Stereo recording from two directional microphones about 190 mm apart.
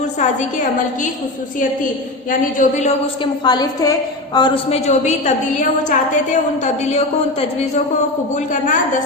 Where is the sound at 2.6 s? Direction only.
35° left (ahead or behind).